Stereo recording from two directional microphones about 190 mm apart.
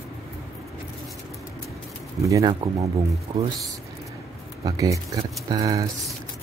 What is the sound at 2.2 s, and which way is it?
Speech, 20° right (ahead or behind).